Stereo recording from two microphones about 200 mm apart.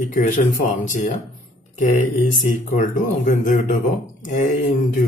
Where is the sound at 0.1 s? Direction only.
40° left (ahead or behind).